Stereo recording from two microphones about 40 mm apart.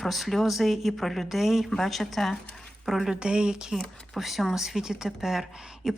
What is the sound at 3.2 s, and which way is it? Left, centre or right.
Speech, right.